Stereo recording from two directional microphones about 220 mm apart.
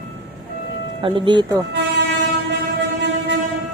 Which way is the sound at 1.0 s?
20° right (ahead or behind).